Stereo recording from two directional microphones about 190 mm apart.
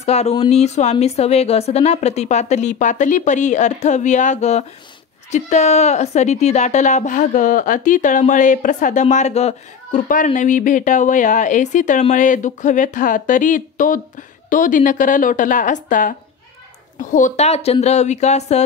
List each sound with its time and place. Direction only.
0.0 s speech: 35° left (ahead or behind)